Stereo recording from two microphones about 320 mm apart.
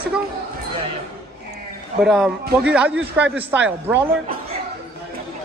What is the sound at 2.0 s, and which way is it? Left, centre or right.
Speech, centre.